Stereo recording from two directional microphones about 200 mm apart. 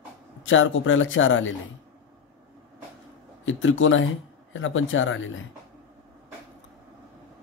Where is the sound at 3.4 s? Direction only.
75° left (ahead or behind).